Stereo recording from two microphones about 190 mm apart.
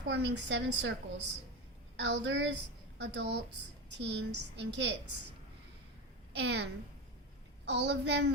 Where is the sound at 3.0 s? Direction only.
65° right (ahead or behind).